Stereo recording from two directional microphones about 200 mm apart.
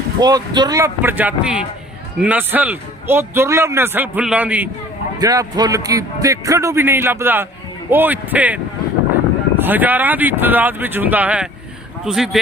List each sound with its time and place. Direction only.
0.2 s a man's voice: 20° right (ahead or behind)
5.2 s a man's voice: 20° right (ahead or behind); by 12.4 s centre (ahead or behind)